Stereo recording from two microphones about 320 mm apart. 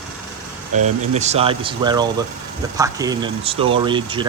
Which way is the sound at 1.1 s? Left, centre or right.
Centre.